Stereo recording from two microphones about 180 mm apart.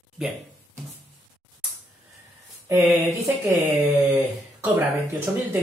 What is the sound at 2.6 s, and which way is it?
Speech, 15° right (ahead or behind).